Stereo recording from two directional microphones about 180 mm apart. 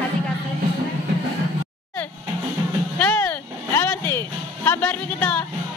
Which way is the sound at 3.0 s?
10° left (ahead or behind).